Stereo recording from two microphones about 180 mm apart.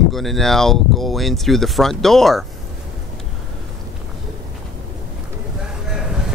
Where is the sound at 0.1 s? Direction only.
Centre (ahead or behind).